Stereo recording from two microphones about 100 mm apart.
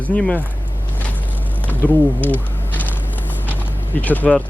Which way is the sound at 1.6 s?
15° left (ahead or behind).